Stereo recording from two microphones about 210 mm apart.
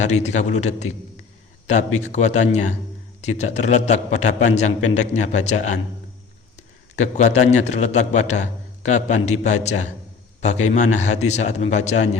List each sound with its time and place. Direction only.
0.0 s a man's voice: 35° left (ahead or behind)
6.9 s a man's voice: 35° left (ahead or behind)